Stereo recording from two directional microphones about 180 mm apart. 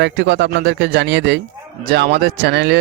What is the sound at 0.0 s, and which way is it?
Speech, 75° right (ahead or behind).